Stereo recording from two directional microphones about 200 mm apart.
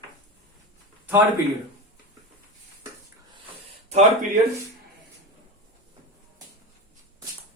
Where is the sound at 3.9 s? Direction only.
30° right (ahead or behind).